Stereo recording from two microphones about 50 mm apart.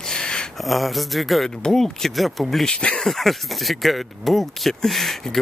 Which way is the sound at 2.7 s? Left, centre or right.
Left.